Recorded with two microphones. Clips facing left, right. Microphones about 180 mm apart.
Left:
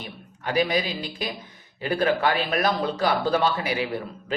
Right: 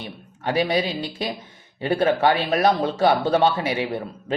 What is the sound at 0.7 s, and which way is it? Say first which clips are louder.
Speech: right 3 dB; 30° right (ahead or behind).